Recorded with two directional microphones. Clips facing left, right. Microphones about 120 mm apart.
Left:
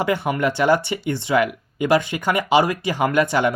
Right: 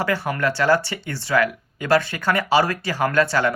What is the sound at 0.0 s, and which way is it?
Speech, 20° left (ahead or behind).